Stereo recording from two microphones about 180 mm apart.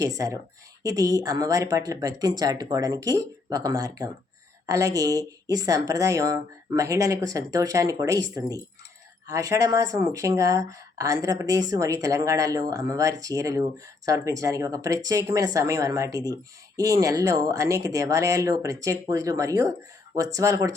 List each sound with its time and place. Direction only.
0.0 s speech: 20° right (ahead or behind)